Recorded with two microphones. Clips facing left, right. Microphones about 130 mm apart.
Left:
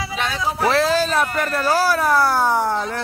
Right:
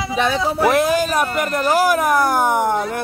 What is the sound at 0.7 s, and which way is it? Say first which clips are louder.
Speech: right 1 dB; 15° right (ahead or behind).